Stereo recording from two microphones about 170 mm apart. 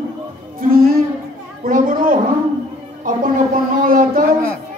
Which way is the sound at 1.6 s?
55° right (ahead or behind).